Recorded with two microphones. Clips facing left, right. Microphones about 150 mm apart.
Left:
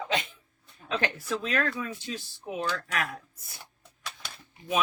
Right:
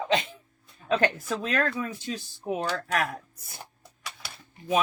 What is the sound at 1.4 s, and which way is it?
Speech, 40° right (ahead or behind).